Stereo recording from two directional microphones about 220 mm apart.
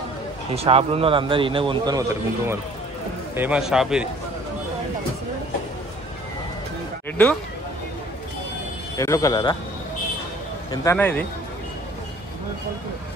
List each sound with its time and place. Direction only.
0.5 s a man's voice: 25° right (ahead or behind)
3.3 s speech: 5° right (ahead or behind)
8.9 s a man's voice: 15° left (ahead or behind)
10.7 s a man's voice: 15° left (ahead or behind)